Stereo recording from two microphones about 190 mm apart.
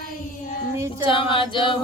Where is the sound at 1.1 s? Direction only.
25° left (ahead or behind).